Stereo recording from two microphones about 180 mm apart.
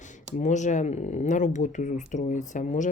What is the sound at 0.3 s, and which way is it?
Speech, 40° left (ahead or behind).